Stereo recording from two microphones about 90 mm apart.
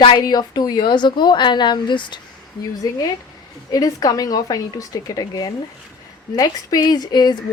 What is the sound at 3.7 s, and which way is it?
A woman's voice, 45° left (ahead or behind).